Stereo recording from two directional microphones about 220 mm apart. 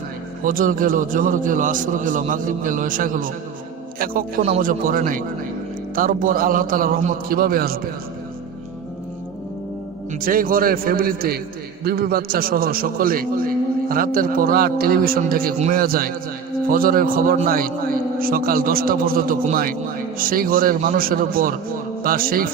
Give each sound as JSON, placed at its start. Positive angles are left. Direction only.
{"t": 0.4, "sound": "a man's voice", "side_deg": -40}
{"t": 10.2, "sound": "a man's voice", "side_deg": -40}